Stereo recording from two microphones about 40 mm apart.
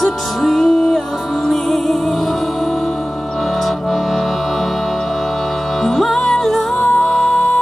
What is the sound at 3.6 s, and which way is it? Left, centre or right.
Music, centre.